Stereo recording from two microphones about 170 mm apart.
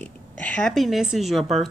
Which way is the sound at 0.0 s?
5° left (ahead or behind).